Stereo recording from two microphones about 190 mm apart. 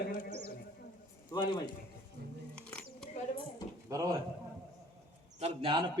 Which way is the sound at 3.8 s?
20° right (ahead or behind).